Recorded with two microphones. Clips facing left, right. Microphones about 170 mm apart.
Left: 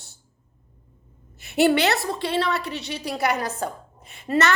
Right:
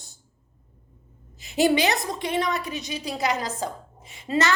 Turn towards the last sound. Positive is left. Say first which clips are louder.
# left 2 dB
turn(degrees=60)  # may be behind; listen again after turning